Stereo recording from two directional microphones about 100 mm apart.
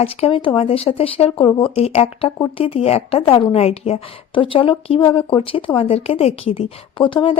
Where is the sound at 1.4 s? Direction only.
65° left (ahead or behind).